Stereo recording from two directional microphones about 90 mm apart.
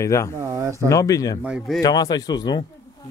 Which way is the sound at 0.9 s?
40° left (ahead or behind).